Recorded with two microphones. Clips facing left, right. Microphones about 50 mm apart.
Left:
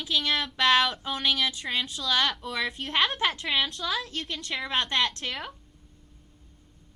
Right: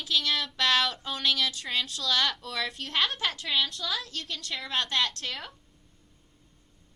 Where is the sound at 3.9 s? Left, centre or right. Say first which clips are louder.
Left 3 dB; left.